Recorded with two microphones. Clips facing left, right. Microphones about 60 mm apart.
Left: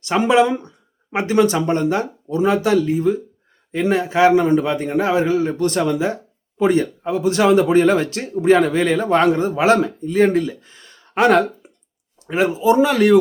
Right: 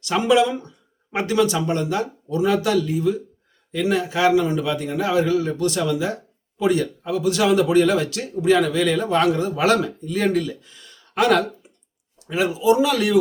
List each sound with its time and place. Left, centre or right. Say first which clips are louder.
0.0 s speech: left 3 dB; left